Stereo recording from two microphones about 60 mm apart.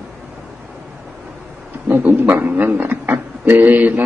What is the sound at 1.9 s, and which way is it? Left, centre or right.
Speech, right.